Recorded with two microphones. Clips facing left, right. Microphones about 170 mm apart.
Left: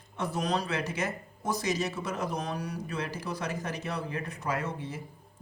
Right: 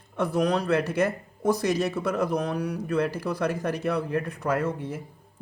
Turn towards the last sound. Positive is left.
turn(degrees=-55)  # may be behind; listen again after turning